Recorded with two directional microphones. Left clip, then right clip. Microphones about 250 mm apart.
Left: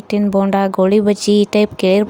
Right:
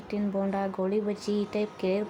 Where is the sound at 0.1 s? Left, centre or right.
Left.